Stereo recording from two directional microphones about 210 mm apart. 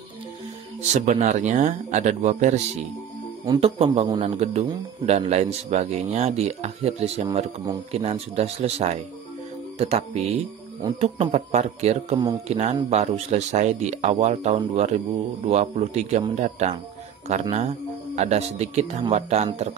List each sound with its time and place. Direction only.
0.9 s a man's voice: 35° right (ahead or behind)